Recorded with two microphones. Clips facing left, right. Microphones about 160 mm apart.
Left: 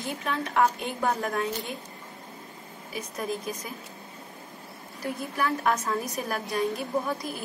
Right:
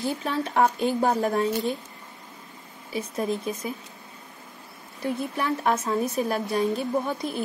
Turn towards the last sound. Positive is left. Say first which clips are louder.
# right 3 dB
turn(degrees=-30)  # may be behind; listen again after turning